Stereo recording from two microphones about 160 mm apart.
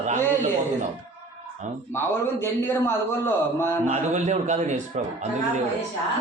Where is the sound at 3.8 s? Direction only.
45° right (ahead or behind).